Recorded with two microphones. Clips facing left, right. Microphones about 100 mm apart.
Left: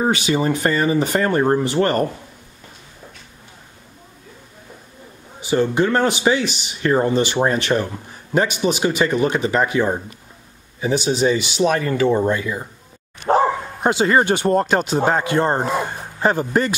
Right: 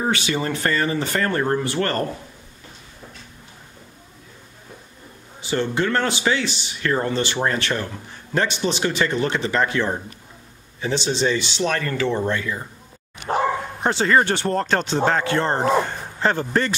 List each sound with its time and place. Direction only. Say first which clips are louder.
0.0 s speech: left 4 dB; 15° left (ahead or behind)
5.4 s speech: left 5 dB; 15° left (ahead or behind)
13.7 s speech: left 2 dB; 10° left (ahead or behind)